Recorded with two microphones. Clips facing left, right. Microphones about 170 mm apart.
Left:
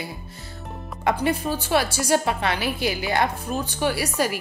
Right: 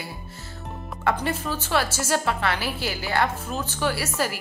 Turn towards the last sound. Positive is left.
turn(degrees=15)  # may be behind; listen again after turning